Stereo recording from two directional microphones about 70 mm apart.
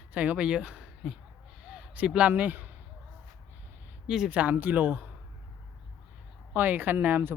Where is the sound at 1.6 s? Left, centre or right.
Centre.